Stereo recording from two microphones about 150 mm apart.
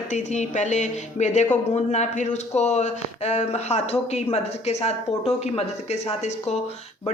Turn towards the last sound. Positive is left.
turn(degrees=45)  # may be behind; listen again after turning